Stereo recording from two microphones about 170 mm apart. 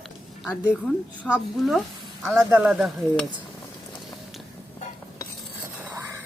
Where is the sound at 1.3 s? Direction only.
Centre (ahead or behind).